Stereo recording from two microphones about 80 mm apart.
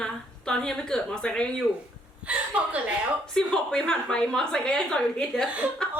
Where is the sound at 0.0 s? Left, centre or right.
Centre.